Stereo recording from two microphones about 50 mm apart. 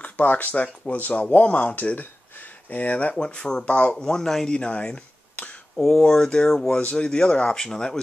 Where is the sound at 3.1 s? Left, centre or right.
Centre.